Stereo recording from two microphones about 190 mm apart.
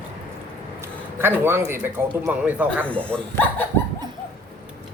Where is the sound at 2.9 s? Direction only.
5° left (ahead or behind).